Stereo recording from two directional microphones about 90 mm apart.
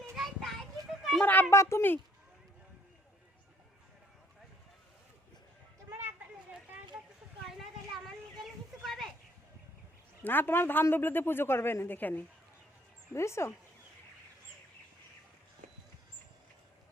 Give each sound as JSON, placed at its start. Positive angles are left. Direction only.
{"t": 0.2, "sound": "child singing", "side_deg": 0}
{"t": 1.2, "sound": "speech", "side_deg": 20}
{"t": 1.5, "sound": "speech", "side_deg": 30}
{"t": 6.0, "sound": "a sound", "side_deg": -25}
{"t": 7.4, "sound": "a sound", "side_deg": 0}
{"t": 10.2, "sound": "speech", "side_deg": 20}
{"t": 13.1, "sound": "speech", "side_deg": 30}